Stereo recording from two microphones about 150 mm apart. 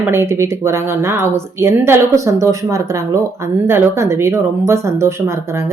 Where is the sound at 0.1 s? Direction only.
15° right (ahead or behind).